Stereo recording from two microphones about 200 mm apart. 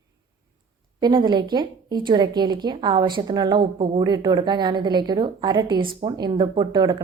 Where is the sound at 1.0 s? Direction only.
20° right (ahead or behind).